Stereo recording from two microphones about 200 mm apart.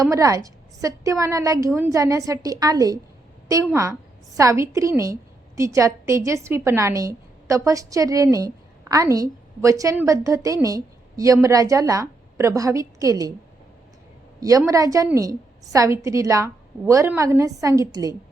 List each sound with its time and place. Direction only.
0.0 s a woman's voice: 15° right (ahead or behind)
14.7 s a woman's voice: 15° right (ahead or behind)